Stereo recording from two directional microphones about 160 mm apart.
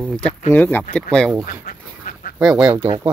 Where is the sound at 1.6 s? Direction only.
60° left (ahead or behind).